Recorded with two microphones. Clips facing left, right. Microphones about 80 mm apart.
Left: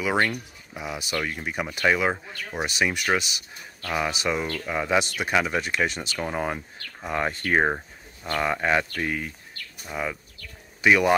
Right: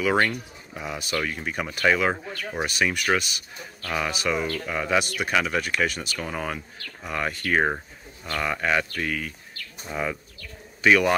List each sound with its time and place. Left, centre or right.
0.3 s speech: centre; by 7.6 s left
7.6 s a sound: centre
8.4 s speech: left
9.8 s speech: centre
10.8 s a man's voice: centre